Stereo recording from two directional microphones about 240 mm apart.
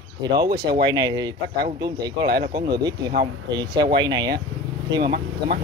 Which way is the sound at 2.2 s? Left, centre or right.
Right.